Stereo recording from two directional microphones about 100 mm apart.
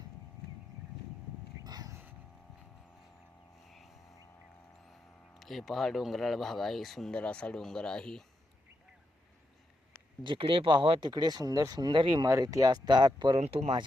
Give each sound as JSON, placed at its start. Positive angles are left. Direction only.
{"t": 1.6, "sound": "a sound", "side_deg": -40}
{"t": 1.9, "sound": "vehicle", "side_deg": -20}
{"t": 3.7, "sound": "vehicle", "side_deg": 0}
{"t": 5.4, "sound": "speech", "side_deg": 0}
{"t": 10.2, "sound": "speech", "side_deg": -60}
{"t": 12.3, "sound": "speech", "side_deg": -35}
{"t": 13.4, "sound": "speech", "side_deg": -90}